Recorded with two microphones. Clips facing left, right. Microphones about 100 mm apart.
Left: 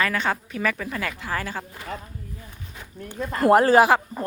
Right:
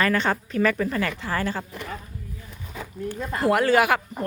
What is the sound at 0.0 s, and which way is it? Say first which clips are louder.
Speech: right 2 dB; 5° left (ahead or behind).